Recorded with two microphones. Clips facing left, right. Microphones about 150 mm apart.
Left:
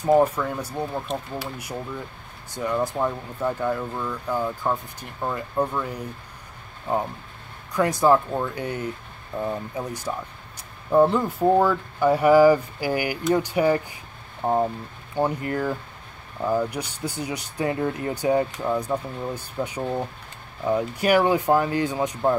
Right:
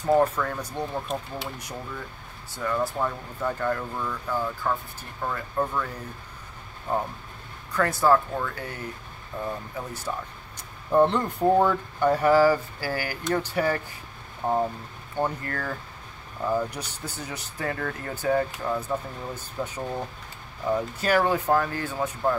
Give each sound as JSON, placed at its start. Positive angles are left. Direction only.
{"t": 0.0, "sound": "speech", "side_deg": 10}
{"t": 2.5, "sound": "speech", "side_deg": 20}
{"t": 7.7, "sound": "speech", "side_deg": 15}